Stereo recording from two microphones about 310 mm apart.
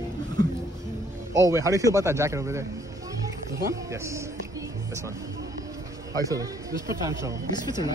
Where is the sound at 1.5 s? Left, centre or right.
Centre.